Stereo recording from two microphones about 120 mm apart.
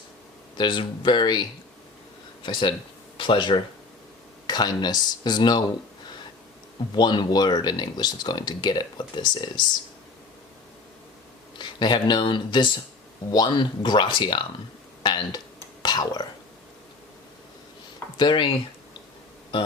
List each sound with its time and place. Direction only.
0.5 s speech: 40° left (ahead or behind)
6.9 s speech: 35° left (ahead or behind)
11.5 s speech: 40° left (ahead or behind)
15.8 s whispering: 35° left (ahead or behind)
18.2 s speech: 45° left (ahead or behind)